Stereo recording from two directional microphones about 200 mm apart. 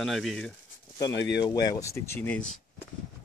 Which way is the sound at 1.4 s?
20° left (ahead or behind).